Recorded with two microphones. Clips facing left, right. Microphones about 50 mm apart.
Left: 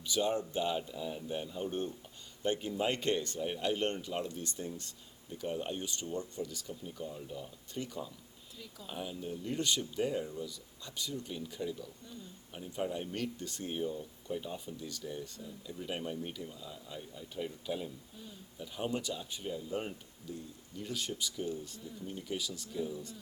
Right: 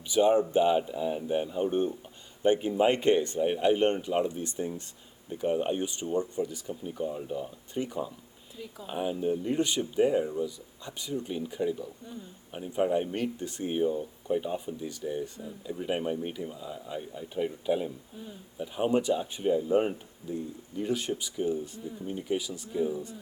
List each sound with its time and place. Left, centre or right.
0.1 s speech: right